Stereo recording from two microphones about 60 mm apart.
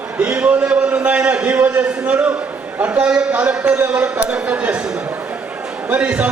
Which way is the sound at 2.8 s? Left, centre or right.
Right.